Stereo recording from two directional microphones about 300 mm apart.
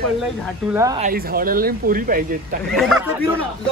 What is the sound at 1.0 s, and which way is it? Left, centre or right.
Speech, right.